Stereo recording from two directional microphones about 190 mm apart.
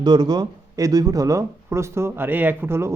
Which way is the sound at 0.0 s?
20° right (ahead or behind).